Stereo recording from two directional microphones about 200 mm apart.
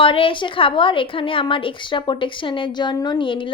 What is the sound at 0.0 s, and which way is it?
A woman's voice, 25° left (ahead or behind).